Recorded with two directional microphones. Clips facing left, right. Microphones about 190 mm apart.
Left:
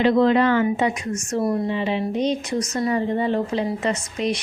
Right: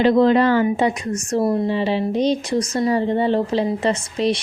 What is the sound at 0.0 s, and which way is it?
Speech, 35° right (ahead or behind).